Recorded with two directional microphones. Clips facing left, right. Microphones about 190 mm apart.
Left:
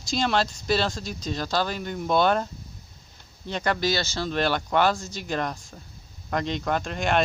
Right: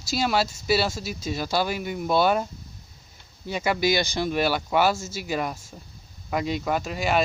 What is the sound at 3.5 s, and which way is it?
Speech, 10° right (ahead or behind).